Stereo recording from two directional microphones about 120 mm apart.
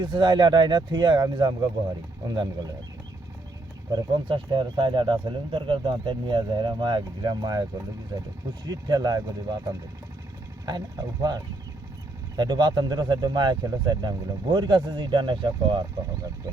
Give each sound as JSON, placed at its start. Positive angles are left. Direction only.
{"t": 0.0, "sound": "speech", "side_deg": -40}
{"t": 3.9, "sound": "speech", "side_deg": -40}
{"t": 10.7, "sound": "speech", "side_deg": -35}